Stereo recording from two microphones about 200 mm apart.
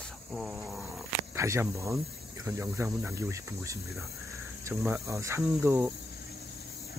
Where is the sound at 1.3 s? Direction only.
15° right (ahead or behind).